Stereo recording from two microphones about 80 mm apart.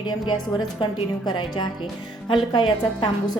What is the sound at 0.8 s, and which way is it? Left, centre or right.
A woman's voice, left.